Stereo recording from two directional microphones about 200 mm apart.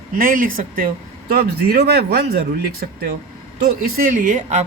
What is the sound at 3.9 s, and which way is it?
Speech, 45° right (ahead or behind).